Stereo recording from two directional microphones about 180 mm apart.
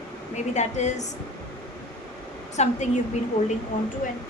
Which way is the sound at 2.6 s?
40° left (ahead or behind).